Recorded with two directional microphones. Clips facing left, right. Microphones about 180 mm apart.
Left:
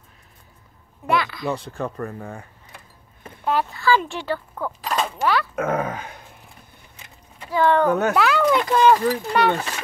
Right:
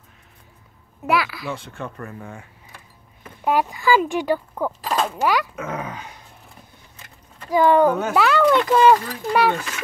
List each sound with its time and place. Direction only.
1.0 s speech: 5° right (ahead or behind)
1.5 s speech: 35° left (ahead or behind)
3.4 s speech: 15° right (ahead or behind)
4.8 s a sound: centre (ahead or behind)
5.2 s speech: 15° right (ahead or behind)
5.6 s speech: 50° left (ahead or behind)
7.4 s speech: 15° right (ahead or behind)
8.1 s speech: centre (ahead or behind)